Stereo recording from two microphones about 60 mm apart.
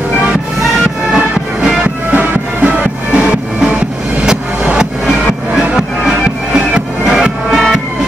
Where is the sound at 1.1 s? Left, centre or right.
Centre.